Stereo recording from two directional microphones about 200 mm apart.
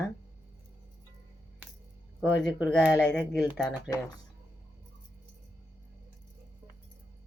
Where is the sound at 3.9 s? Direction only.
20° left (ahead or behind).